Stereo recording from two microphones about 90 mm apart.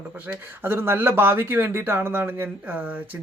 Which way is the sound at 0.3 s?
20° right (ahead or behind).